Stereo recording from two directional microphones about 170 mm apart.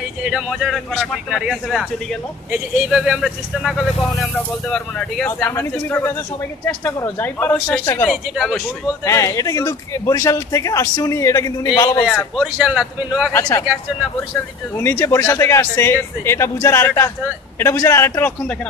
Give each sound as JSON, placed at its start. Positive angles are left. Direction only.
{"t": 0.2, "sound": "speech", "side_deg": 0}
{"t": 8.1, "sound": "speech", "side_deg": 0}
{"t": 9.0, "sound": "a man's voice", "side_deg": 20}
{"t": 12.4, "sound": "speech", "side_deg": -5}
{"t": 13.3, "sound": "speech", "side_deg": 15}
{"t": 14.8, "sound": "speech", "side_deg": 15}